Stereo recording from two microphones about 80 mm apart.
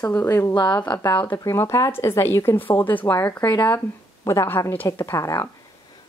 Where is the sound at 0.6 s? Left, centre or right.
Left.